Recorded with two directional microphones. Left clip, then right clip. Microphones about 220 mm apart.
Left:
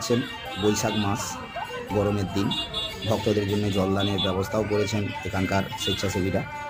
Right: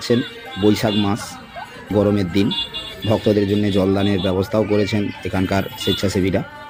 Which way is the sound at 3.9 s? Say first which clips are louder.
Right 6 dB; 25° right (ahead or behind).